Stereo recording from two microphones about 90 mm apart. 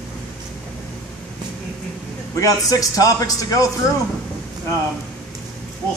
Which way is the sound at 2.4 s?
40° left (ahead or behind).